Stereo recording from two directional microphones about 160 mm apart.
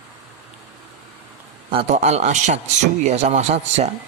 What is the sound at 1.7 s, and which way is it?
Speech, 40° right (ahead or behind).